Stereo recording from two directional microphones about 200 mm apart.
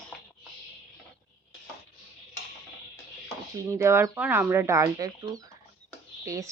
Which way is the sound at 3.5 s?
15° right (ahead or behind).